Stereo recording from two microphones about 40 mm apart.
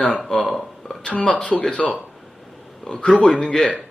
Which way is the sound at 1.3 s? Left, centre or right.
Left.